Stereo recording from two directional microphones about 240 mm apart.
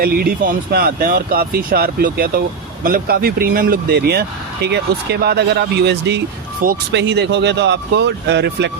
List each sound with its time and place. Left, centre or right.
0.0 s speech: right